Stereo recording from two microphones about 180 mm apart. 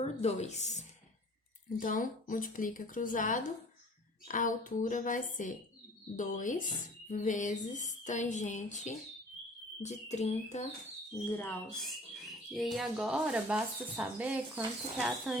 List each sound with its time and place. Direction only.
0.0 s speech: 35° left (ahead or behind)
11.3 s speech: 15° left (ahead or behind)
12.5 s speech: centre (ahead or behind)